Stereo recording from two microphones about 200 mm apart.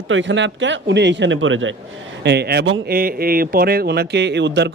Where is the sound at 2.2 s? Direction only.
55° right (ahead or behind).